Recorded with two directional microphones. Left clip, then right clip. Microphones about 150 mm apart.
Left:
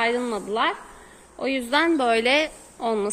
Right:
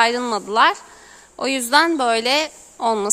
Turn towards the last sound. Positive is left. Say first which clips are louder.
# right 5 dB
turn(degrees=-50)  # may be behind; listen again after turning